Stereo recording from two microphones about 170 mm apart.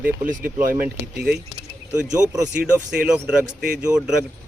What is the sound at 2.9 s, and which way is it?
Speech, 5° right (ahead or behind).